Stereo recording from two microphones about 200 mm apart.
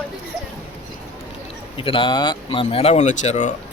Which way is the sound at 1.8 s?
25° left (ahead or behind).